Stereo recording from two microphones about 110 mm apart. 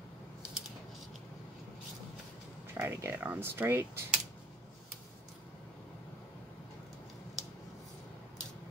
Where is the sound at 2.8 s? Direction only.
20° right (ahead or behind).